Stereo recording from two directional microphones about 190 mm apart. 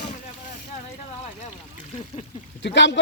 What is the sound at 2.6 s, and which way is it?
Speech, 65° left (ahead or behind).